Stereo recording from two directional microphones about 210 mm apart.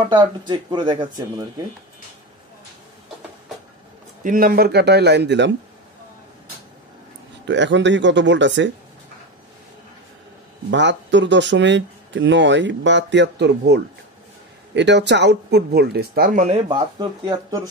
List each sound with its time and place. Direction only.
0.0 s speech: 20° right (ahead or behind)
4.2 s speech: 40° right (ahead or behind)
7.4 s speech: 60° right (ahead or behind)
10.7 s speech: 60° right (ahead or behind); by 17.6 s 20° right (ahead or behind)